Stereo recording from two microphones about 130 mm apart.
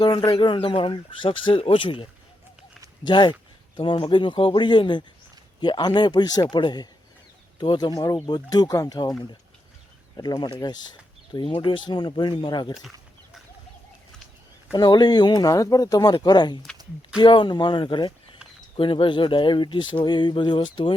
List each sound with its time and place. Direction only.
0.0 s speech: 35° left (ahead or behind)
3.1 s speech: 35° left (ahead or behind)
10.4 s speech: 30° left (ahead or behind)
14.7 s speech: 30° left (ahead or behind)